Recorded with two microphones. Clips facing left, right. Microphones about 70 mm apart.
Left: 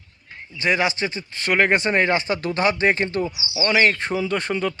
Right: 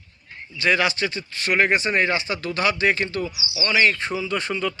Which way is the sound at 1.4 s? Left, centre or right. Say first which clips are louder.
Left 1 dB; left.